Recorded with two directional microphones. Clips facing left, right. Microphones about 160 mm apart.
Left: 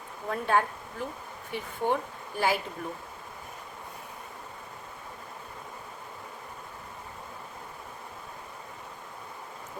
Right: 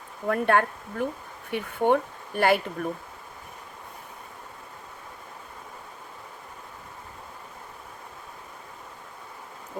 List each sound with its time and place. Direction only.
0.3 s speech: 65° right (ahead or behind)